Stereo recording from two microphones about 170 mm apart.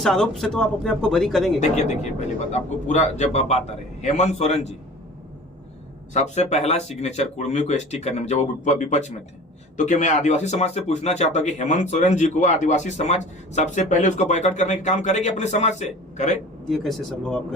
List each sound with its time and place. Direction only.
0.0 s speech: centre (ahead or behind)
1.5 s speech: 40° left (ahead or behind)
6.1 s speech: 40° left (ahead or behind)
16.6 s speech: centre (ahead or behind)